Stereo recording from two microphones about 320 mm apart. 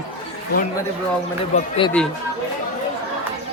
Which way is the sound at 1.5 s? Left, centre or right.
Centre.